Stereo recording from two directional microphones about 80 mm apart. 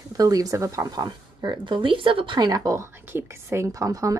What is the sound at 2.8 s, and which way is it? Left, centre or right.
Speech, right.